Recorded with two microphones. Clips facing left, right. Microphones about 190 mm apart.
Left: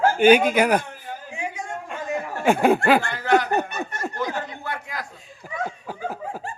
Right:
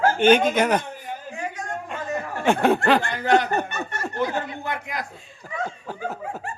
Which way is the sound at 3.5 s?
15° left (ahead or behind).